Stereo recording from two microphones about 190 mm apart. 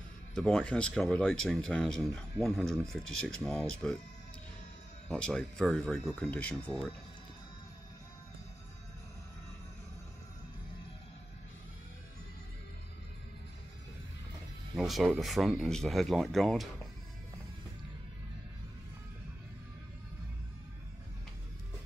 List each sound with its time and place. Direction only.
0.3 s speech: 5° left (ahead or behind)
5.0 s speech: 5° left (ahead or behind)
14.8 s speech: centre (ahead or behind)